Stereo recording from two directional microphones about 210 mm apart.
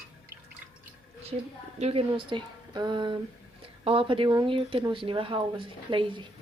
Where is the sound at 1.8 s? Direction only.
25° right (ahead or behind).